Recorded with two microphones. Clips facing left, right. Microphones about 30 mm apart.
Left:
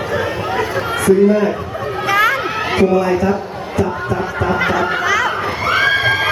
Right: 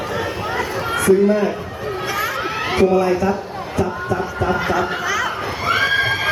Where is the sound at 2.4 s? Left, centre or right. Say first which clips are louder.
Left 2 dB; centre.